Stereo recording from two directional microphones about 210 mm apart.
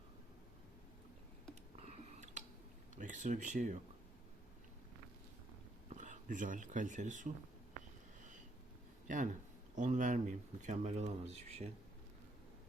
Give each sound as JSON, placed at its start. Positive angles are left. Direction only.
{"t": 1.8, "sound": "a sound", "side_deg": -30}
{"t": 2.9, "sound": "speech", "side_deg": -35}
{"t": 5.9, "sound": "speech", "side_deg": -35}
{"t": 9.0, "sound": "speech", "side_deg": -40}